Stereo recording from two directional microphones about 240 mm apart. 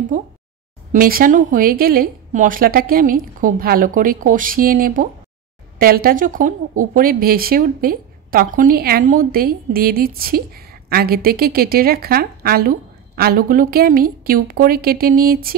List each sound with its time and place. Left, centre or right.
0.1 s a woman's voice: right